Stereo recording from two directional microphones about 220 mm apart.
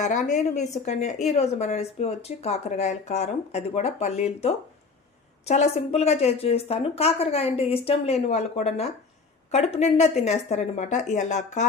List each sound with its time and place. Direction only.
0.0 s a woman's voice: 35° left (ahead or behind)